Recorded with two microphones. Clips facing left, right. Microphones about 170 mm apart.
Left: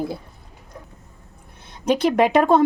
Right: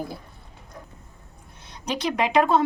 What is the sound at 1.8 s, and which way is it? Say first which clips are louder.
Speech: left 8 dB; 50° left (ahead or behind).